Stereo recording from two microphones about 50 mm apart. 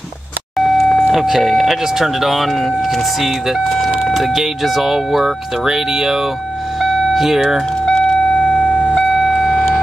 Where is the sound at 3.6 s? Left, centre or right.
Centre.